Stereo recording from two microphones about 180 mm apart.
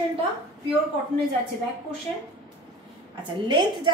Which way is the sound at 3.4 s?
25° right (ahead or behind).